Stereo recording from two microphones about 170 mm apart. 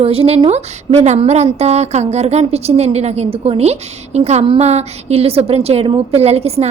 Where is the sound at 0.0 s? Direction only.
35° right (ahead or behind).